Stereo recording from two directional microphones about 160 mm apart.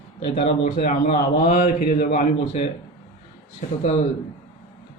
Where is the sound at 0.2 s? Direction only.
35° left (ahead or behind).